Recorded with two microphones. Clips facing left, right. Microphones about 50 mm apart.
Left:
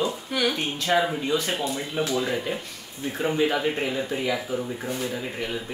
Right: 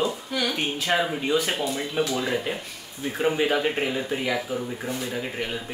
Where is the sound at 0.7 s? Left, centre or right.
Centre.